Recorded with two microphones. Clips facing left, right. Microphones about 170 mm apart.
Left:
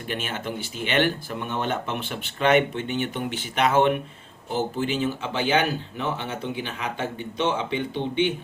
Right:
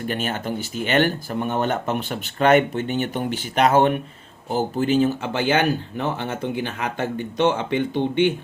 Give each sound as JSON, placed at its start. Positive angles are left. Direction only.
{"t": 0.1, "sound": "speech", "side_deg": -40}